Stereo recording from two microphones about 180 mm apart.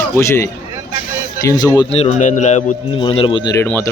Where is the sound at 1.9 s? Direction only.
40° left (ahead or behind).